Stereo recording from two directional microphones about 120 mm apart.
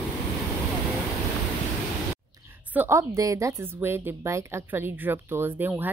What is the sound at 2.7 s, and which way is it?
A woman's voice, 20° right (ahead or behind).